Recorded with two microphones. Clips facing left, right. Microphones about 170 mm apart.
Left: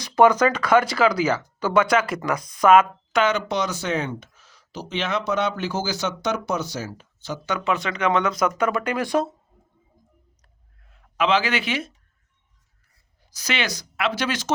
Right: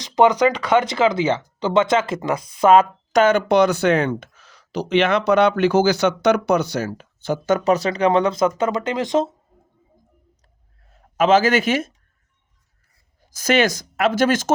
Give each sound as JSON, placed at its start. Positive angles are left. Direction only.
{"t": 0.0, "sound": "speech", "side_deg": -15}
{"t": 10.8, "sound": "speech", "side_deg": -40}
{"t": 13.3, "sound": "speech", "side_deg": -45}